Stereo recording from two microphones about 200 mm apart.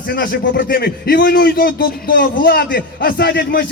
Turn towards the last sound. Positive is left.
turn(degrees=55)  # may be behind; listen again after turning